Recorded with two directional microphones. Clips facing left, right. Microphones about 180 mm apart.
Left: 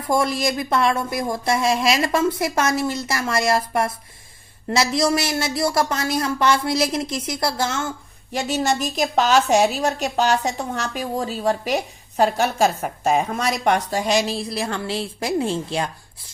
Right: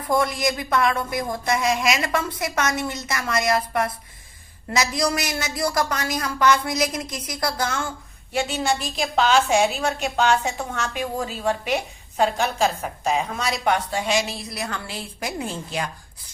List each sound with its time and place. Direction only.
0.1 s speech: 25° left (ahead or behind)
8.3 s a woman's voice: 40° left (ahead or behind)